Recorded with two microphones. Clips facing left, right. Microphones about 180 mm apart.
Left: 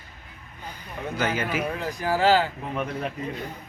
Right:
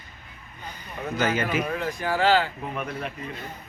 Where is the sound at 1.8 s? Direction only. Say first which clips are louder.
Left 1 dB; 35° left (ahead or behind).